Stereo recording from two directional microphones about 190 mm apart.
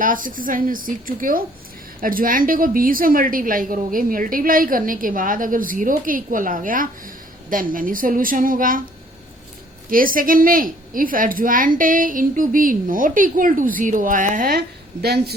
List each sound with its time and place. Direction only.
0.0 s a woman's voice: 45° right (ahead or behind)
9.9 s a woman's voice: 45° right (ahead or behind)
15.0 s speech: 60° right (ahead or behind)